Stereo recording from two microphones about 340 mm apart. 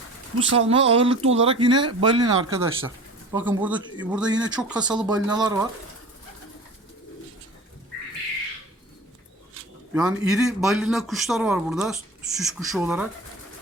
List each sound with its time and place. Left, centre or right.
0.4 s a woman's voice: right
0.7 s speech: centre
9.9 s speech: centre